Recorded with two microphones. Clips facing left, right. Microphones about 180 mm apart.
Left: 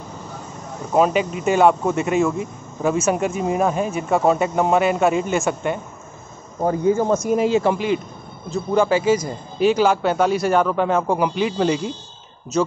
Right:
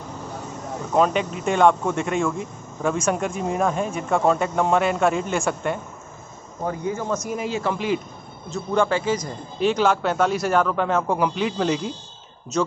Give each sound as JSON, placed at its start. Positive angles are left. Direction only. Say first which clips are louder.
{"t": 0.9, "sound": "speech", "louder": "left 3 dB", "side_deg": 5}
{"t": 6.6, "sound": "speech", "louder": "left 8 dB", "side_deg": 35}
{"t": 8.5, "sound": "speech", "louder": "left 3 dB", "side_deg": 5}